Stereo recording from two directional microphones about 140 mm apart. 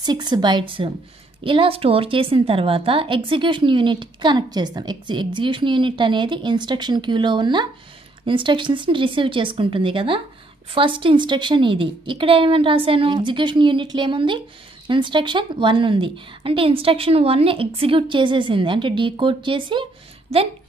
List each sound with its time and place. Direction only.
0.0 s a woman's voice: 30° right (ahead or behind)